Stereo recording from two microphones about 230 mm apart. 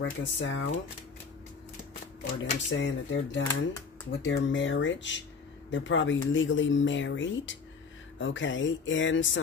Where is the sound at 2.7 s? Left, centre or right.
Left.